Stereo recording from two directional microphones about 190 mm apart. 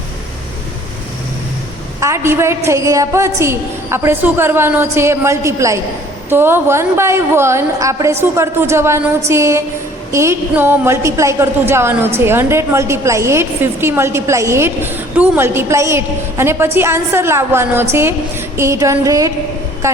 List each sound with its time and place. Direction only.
2.0 s a woman's voice: 15° right (ahead or behind)